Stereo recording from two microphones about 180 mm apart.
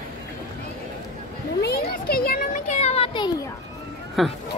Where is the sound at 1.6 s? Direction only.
60° left (ahead or behind); by 3.3 s 30° left (ahead or behind).